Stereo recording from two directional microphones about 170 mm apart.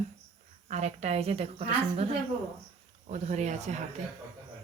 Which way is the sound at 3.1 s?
45° right (ahead or behind).